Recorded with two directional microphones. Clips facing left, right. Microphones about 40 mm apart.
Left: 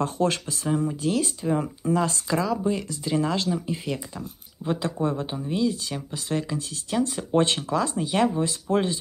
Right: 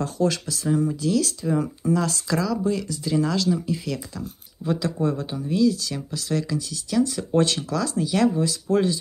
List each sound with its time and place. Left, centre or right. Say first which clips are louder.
0.0 s speech: right 1 dB; left